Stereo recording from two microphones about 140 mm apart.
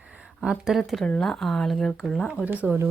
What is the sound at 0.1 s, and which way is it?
Speech, 5° right (ahead or behind).